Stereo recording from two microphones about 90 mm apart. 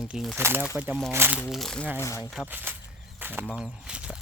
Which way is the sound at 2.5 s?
20° right (ahead or behind).